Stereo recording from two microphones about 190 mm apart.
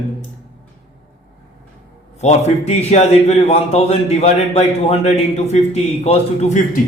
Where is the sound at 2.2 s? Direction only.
35° left (ahead or behind).